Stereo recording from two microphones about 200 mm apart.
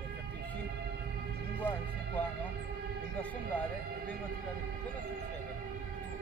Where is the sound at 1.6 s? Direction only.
10° left (ahead or behind).